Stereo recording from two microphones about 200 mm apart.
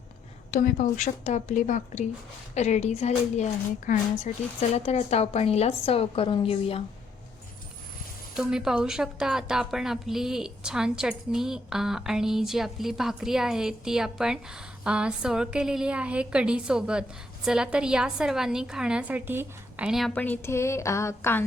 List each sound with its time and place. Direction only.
0.5 s a woman's voice: 40° left (ahead or behind)
8.4 s a woman's voice: 5° right (ahead or behind); by 21.4 s 10° left (ahead or behind)